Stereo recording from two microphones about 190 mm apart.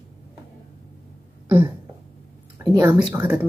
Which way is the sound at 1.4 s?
10° right (ahead or behind).